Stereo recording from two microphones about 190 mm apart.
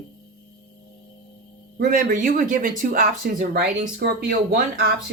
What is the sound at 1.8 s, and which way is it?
Speech, 45° right (ahead or behind).